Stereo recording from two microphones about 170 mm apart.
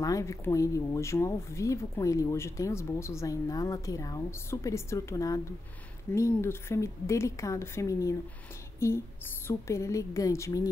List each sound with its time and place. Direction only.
0.0 s speech: 20° left (ahead or behind)